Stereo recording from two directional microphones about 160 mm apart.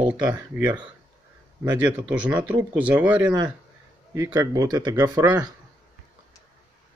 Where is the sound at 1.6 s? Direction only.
20° right (ahead or behind).